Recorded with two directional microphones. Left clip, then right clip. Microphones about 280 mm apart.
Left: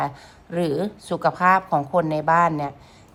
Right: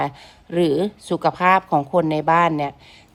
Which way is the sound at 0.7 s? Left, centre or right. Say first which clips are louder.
Right 4 dB; right.